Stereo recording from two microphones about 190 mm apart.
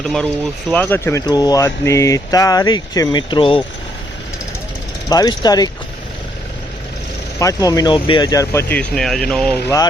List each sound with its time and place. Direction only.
0.7 s speech: 10° left (ahead or behind); by 3.6 s 25° left (ahead or behind)
5.0 s speech: 20° left (ahead or behind)
7.3 s speech: 20° left (ahead or behind)